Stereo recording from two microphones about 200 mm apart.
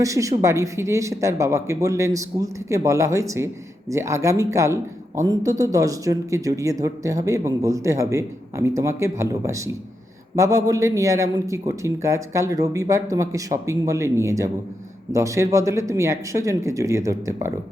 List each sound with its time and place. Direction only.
0.0 s speech: 15° right (ahead or behind)